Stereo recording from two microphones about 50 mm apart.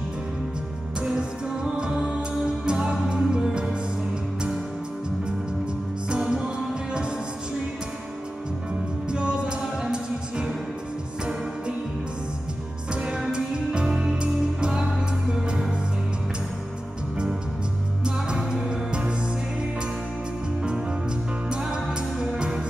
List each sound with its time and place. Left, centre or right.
0.9 s music: centre
6.0 s music: centre
9.1 s music: centre
12.9 s music: centre
18.0 s music: centre
21.5 s music: centre